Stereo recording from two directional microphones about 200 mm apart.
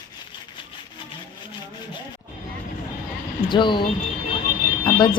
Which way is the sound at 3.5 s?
25° left (ahead or behind).